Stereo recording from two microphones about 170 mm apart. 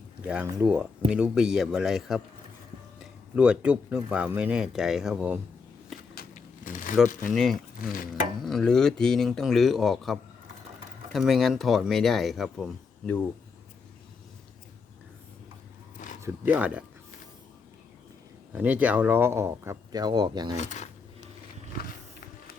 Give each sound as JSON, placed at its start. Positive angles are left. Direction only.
{"t": 0.3, "sound": "speech", "side_deg": -5}
{"t": 6.1, "sound": "a sound", "side_deg": 55}
{"t": 7.3, "sound": "speech", "side_deg": 0}
{"t": 16.2, "sound": "speech", "side_deg": -10}
{"t": 18.5, "sound": "speech", "side_deg": -10}
{"t": 20.6, "sound": "speech", "side_deg": 45}